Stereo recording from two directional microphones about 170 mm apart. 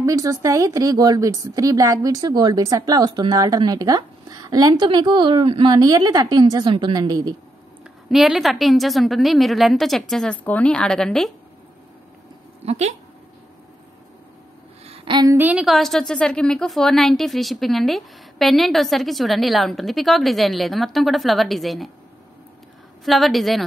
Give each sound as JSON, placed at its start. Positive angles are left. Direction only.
{"t": 0.0, "sound": "a woman's voice", "side_deg": -20}
{"t": 8.1, "sound": "a woman's voice", "side_deg": 0}
{"t": 12.6, "sound": "speech", "side_deg": -40}
{"t": 14.9, "sound": "a sound", "side_deg": -25}
{"t": 15.3, "sound": "a woman's voice", "side_deg": -10}
{"t": 23.0, "sound": "a woman's voice", "side_deg": 0}